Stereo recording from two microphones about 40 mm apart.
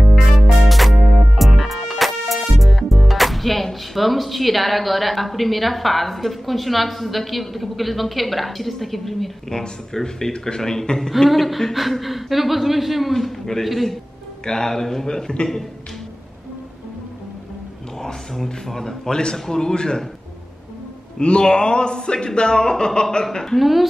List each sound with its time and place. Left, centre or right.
0.0 s music: centre
9.6 s a man's voice: centre
11.2 s a woman's voice: centre
13.1 s a woman's voice: centre
14.4 s a man's voice: centre
18.0 s a man's voice: centre
21.2 s a man's voice: left
23.6 s a woman's voice: centre